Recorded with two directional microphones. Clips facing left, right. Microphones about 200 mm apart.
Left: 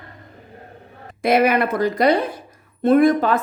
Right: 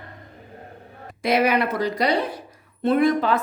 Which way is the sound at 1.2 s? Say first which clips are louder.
Left 3 dB; 50° left (ahead or behind).